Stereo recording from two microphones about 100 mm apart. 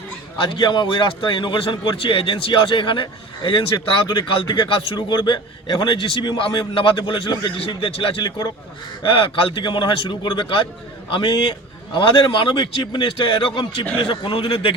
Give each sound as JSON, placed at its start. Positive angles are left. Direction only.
{"t": 0.5, "sound": "a man's voice", "side_deg": 50}
{"t": 8.2, "sound": "speech", "side_deg": 40}
{"t": 9.0, "sound": "a man's voice", "side_deg": 60}